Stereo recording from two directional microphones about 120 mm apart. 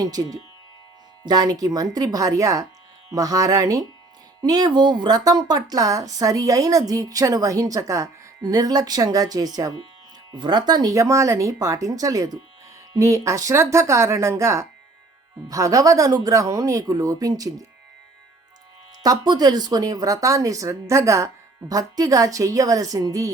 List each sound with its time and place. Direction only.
0.0 s speech: 30° right (ahead or behind)
19.0 s speech: 35° right (ahead or behind)